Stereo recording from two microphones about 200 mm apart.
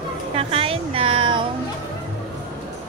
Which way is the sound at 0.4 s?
30° right (ahead or behind).